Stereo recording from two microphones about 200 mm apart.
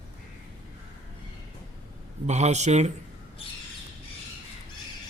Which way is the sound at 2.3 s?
35° right (ahead or behind).